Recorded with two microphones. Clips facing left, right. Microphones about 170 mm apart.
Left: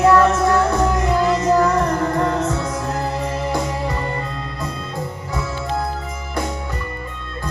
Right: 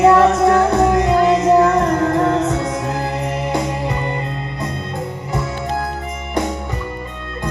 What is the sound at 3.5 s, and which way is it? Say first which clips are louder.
Music: right 2 dB; 20° right (ahead or behind).